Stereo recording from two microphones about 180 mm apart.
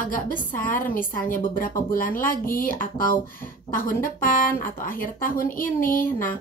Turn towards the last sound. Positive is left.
turn(degrees=50)  # may be behind; listen again after turning